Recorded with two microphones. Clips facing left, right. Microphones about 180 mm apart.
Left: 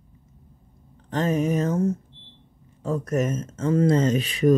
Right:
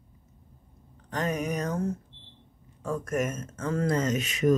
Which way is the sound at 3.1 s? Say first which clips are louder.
Left 4 dB; 25° left (ahead or behind).